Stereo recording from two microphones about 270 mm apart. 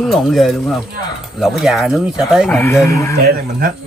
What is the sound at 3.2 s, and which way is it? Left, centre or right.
Speech, right.